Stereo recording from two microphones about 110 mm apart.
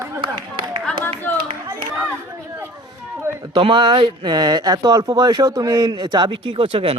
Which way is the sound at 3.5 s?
50° right (ahead or behind).